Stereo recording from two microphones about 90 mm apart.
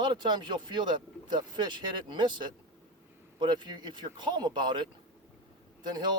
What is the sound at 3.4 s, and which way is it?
Speech, 60° right (ahead or behind).